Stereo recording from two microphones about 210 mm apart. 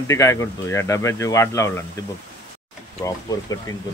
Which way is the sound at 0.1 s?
15° left (ahead or behind).